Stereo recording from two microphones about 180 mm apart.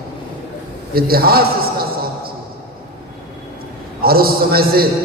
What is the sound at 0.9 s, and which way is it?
Speech, 55° right (ahead or behind).